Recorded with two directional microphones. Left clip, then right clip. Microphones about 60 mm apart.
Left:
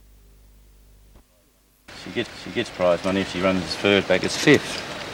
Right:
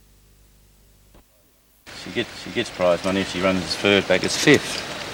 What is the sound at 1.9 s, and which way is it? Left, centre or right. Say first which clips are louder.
Speech: right 1 dB; right.